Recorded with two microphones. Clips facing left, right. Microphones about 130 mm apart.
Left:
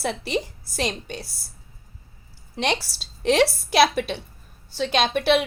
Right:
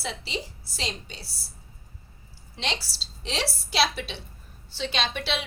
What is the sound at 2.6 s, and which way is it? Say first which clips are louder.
A woman's voice: left 8 dB; 55° left (ahead or behind).